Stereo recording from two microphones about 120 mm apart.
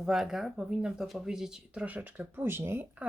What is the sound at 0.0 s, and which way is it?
Speech, 5° right (ahead or behind).